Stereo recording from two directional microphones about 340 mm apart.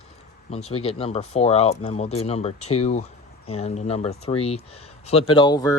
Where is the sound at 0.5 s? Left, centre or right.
Centre.